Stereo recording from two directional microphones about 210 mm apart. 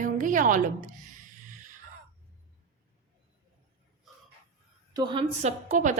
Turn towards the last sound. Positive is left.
turn(degrees=-35)  # may be behind; listen again after turning